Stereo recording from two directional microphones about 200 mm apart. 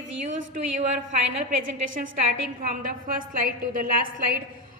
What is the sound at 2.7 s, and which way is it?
A woman's voice, 45° right (ahead or behind).